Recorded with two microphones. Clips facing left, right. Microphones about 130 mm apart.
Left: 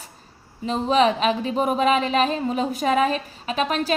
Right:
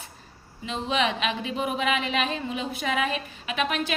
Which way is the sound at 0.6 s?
40° left (ahead or behind).